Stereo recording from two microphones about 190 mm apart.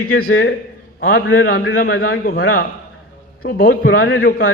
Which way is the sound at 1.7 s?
50° left (ahead or behind).